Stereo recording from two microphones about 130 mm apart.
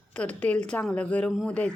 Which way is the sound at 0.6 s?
10° left (ahead or behind).